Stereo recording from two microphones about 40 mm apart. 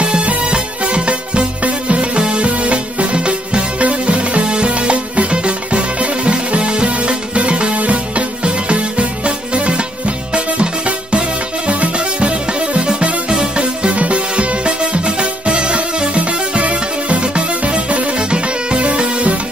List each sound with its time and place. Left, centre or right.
0.0 s music: right